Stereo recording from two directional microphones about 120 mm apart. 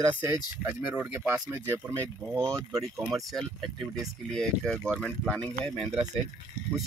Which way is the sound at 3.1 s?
Centre (ahead or behind).